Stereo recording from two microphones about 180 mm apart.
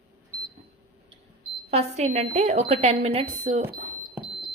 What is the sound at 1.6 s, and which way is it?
A woman's voice, 35° right (ahead or behind).